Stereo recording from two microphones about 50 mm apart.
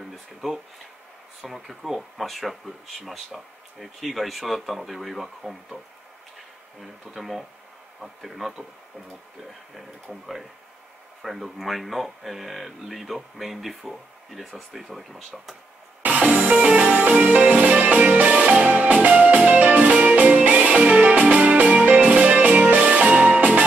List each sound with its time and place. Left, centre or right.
0.1 s speech: centre
6.8 s speech: centre
11.2 s speech: centre
16.0 s music: right